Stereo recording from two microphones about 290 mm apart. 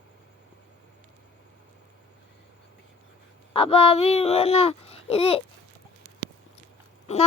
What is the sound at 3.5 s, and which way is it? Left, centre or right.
A child's voice, centre.